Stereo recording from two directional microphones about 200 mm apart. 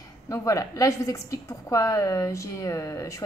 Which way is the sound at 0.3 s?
15° left (ahead or behind).